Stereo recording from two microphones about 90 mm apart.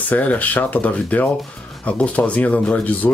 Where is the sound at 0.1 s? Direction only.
15° left (ahead or behind).